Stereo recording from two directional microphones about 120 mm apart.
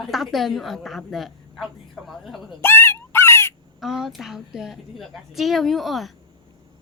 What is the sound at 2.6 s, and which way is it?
Fowl, 20° left (ahead or behind).